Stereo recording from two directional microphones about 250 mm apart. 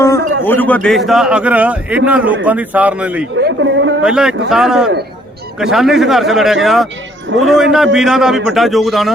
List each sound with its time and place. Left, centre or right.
0.4 s a man's voice: centre
3.4 s a man's voice: right
4.0 s a man's voice: centre